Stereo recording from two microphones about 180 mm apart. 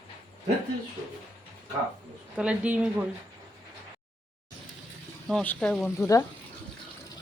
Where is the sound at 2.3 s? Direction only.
5° right (ahead or behind).